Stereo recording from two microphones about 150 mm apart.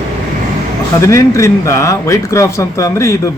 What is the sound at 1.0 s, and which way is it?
Speech, 20° left (ahead or behind).